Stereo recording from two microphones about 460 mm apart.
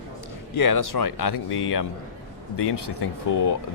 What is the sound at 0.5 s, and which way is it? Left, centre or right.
Speech, left.